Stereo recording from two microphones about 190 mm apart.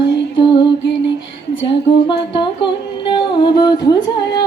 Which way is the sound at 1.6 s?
25° left (ahead or behind).